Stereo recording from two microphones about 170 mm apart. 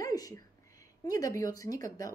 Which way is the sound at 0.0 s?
20° left (ahead or behind).